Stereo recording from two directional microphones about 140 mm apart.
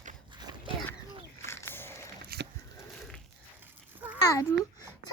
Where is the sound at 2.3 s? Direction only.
90° right.